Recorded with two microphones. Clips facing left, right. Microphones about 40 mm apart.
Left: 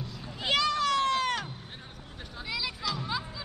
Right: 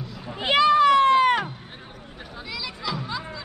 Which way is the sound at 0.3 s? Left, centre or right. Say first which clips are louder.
Right 9 dB; right.